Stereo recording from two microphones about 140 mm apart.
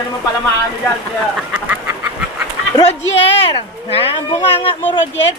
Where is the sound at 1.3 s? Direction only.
10° right (ahead or behind).